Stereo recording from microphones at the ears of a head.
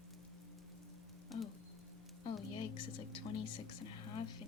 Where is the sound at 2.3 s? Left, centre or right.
Left.